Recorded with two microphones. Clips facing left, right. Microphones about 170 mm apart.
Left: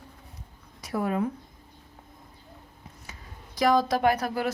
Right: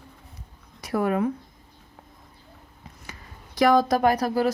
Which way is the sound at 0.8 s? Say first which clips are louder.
Right 4 dB; 65° right (ahead or behind).